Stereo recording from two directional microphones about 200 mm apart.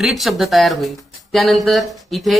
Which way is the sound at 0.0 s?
Centre (ahead or behind).